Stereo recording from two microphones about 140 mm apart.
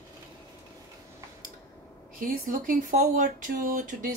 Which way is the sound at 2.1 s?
75° right (ahead or behind).